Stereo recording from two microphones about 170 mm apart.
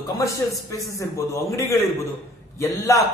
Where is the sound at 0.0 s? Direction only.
20° left (ahead or behind).